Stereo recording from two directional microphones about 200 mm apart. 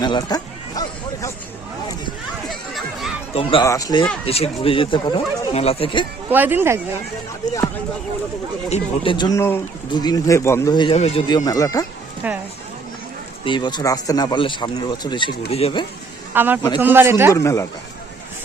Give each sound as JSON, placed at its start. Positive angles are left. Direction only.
{"t": 0.0, "sound": "a sound", "side_deg": 20}
{"t": 2.5, "sound": "a sound", "side_deg": 0}
{"t": 3.3, "sound": "speech", "side_deg": 25}
{"t": 6.2, "sound": "speech", "side_deg": -10}
{"t": 8.7, "sound": "speech", "side_deg": 25}
{"t": 12.2, "sound": "speech", "side_deg": -5}
{"t": 13.4, "sound": "speech", "side_deg": 25}
{"t": 16.3, "sound": "a man's voice", "side_deg": -10}
{"t": 17.3, "sound": "speech", "side_deg": 15}